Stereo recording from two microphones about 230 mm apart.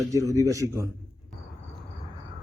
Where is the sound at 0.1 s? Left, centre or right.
Centre.